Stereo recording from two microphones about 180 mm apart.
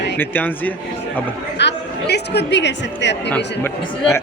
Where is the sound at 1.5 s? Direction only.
70° left (ahead or behind).